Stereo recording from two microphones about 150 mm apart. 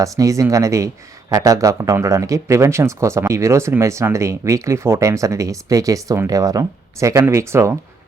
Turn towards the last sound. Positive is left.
turn(degrees=-20)  # may be behind; listen again after turning